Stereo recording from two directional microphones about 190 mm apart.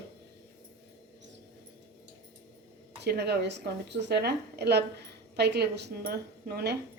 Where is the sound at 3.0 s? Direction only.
60° right (ahead or behind).